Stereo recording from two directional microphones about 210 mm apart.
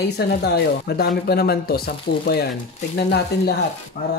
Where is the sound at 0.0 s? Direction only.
50° left (ahead or behind).